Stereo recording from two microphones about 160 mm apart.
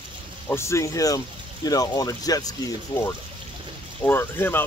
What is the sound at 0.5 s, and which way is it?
Speech, 15° left (ahead or behind).